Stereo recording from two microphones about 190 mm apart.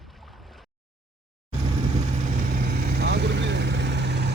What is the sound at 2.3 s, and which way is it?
Vehicle, 50° right (ahead or behind).